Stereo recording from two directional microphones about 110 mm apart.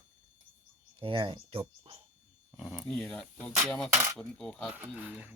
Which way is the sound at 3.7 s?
5° left (ahead or behind).